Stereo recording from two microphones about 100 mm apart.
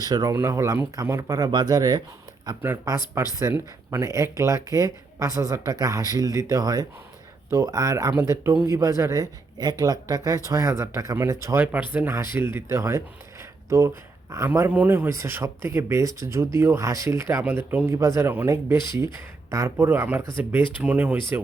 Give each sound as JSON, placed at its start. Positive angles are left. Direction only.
{"t": 0.0, "sound": "speech", "side_deg": -40}
{"t": 0.3, "sound": "speech", "side_deg": -30}
{"t": 3.2, "sound": "speech", "side_deg": -30}
{"t": 11.6, "sound": "speech", "side_deg": -15}
{"t": 14.7, "sound": "speech", "side_deg": -20}